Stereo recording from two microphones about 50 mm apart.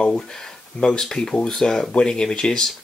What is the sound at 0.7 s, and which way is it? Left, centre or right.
Speech, centre.